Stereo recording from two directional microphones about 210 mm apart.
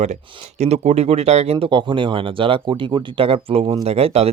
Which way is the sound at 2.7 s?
15° right (ahead or behind).